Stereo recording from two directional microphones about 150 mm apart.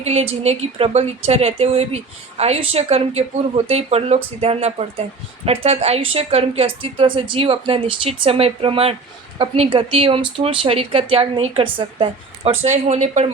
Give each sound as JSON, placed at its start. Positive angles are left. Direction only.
{"t": 0.0, "sound": "speech", "side_deg": -45}